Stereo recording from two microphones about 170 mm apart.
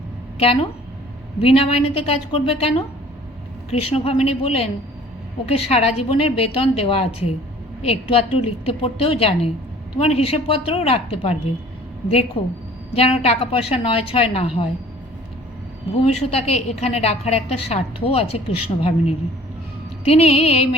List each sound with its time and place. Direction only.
0.3 s a woman's voice: 35° left (ahead or behind)
16.0 s a woman's voice: 35° left (ahead or behind)